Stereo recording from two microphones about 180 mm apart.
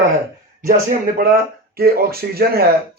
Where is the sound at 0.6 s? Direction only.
50° right (ahead or behind).